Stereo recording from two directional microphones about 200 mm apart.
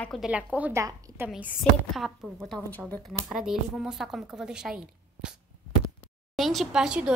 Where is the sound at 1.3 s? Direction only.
Centre (ahead or behind).